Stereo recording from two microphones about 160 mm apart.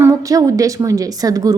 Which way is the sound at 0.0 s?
20° right (ahead or behind).